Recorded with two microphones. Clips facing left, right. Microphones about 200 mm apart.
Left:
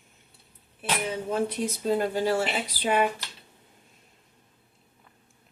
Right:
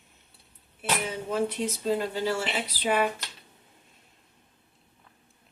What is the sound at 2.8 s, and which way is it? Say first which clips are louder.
Speech: left 1 dB; 50° left (ahead or behind).